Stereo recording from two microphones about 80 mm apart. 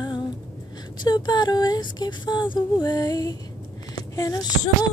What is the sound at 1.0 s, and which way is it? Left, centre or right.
Speech, left.